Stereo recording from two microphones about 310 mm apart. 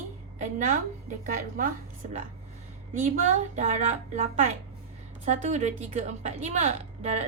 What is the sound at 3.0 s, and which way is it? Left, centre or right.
A woman's voice, right.